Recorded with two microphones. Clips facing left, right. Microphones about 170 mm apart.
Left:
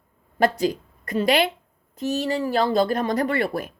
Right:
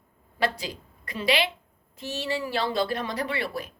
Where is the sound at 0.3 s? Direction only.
45° left (ahead or behind).